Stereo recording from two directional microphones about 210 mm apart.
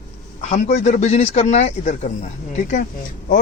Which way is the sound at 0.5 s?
35° left (ahead or behind).